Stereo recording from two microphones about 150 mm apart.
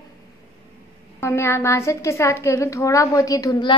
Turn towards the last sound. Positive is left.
turn(degrees=30)  # may be behind; listen again after turning